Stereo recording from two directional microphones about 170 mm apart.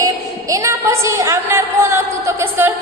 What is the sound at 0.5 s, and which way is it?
A woman's voice, 15° right (ahead or behind).